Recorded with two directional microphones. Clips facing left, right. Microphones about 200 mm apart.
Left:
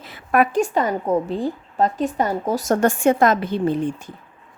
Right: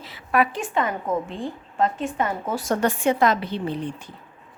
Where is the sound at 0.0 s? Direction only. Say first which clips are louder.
Left 3 dB; 50° left (ahead or behind).